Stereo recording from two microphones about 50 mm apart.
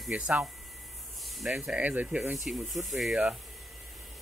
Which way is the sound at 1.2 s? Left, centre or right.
Centre.